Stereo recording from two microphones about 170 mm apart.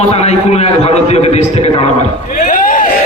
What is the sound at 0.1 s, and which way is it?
A man's voice, 40° left (ahead or behind).